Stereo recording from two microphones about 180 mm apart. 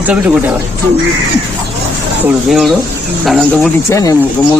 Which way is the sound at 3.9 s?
15° left (ahead or behind).